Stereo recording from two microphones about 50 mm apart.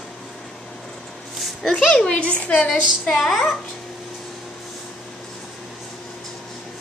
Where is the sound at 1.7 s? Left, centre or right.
Left.